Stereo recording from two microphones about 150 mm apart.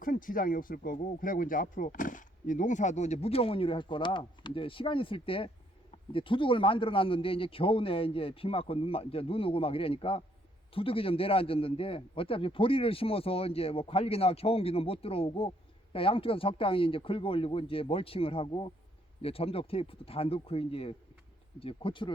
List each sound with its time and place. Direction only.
0.0 s a man's voice: 65° left (ahead or behind); by 22.1 s 35° left (ahead or behind)